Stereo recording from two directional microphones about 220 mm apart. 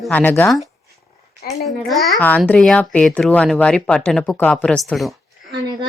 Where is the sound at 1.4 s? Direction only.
45° left (ahead or behind).